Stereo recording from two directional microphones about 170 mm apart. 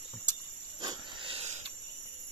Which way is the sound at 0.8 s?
25° right (ahead or behind).